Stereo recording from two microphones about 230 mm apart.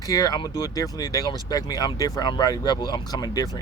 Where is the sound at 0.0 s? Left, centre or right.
Centre.